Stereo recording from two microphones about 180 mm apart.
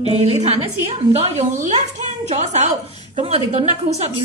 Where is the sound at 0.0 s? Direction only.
35° right (ahead or behind).